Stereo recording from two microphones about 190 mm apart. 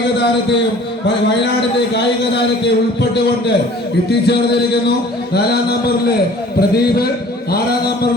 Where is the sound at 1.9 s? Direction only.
65° left (ahead or behind).